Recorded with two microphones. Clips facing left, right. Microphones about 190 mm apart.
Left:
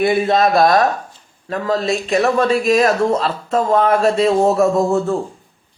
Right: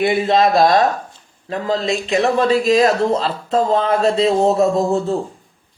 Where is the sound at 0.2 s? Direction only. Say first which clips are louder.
Even; 25° right (ahead or behind).